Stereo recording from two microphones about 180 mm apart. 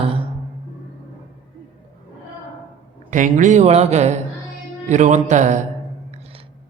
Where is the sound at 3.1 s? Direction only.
45° right (ahead or behind).